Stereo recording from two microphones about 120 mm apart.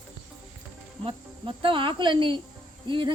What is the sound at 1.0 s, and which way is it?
Insect, 45° right (ahead or behind).